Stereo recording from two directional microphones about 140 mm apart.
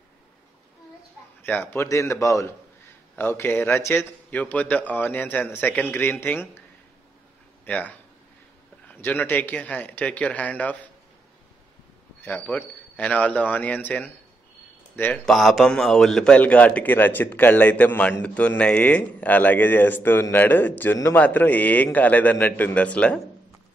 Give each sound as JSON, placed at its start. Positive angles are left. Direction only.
{"t": 1.4, "sound": "a man's voice", "side_deg": 10}
{"t": 7.6, "sound": "a man's voice", "side_deg": 10}
{"t": 12.2, "sound": "a man's voice", "side_deg": 10}
{"t": 15.2, "sound": "a man's voice", "side_deg": 0}